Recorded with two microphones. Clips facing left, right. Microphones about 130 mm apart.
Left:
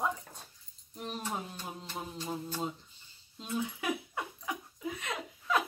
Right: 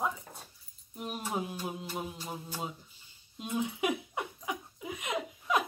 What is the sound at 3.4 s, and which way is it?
Dog, 20° right (ahead or behind).